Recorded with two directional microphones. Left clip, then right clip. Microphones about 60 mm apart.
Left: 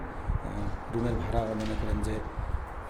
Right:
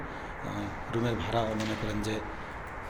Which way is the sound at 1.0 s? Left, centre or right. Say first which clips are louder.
Right 2 dB; left.